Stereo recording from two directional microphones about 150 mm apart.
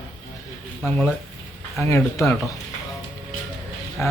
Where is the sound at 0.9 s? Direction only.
15° left (ahead or behind).